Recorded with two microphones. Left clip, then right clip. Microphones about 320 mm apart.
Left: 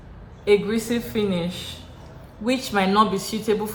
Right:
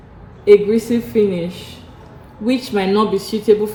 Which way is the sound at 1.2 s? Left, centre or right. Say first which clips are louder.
Right 10 dB; centre.